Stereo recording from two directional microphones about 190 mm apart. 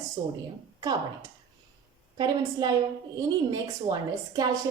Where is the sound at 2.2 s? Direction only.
20° right (ahead or behind).